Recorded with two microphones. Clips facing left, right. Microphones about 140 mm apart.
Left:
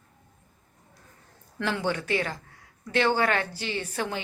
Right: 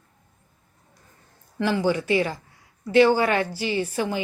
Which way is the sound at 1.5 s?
5° right (ahead or behind).